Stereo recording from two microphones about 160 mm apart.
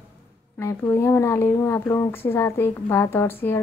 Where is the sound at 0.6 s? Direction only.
20° left (ahead or behind).